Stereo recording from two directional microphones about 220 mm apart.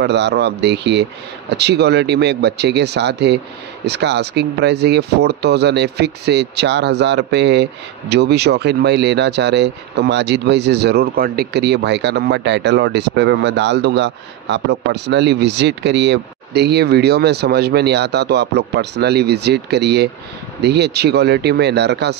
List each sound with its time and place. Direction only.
0.0 s speech: 50° right (ahead or behind)